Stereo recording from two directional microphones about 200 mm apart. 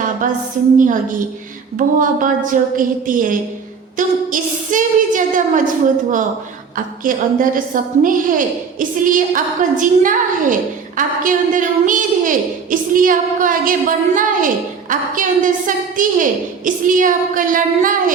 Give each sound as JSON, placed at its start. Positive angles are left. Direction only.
{"t": 0.8, "sound": "a woman's voice", "side_deg": -40}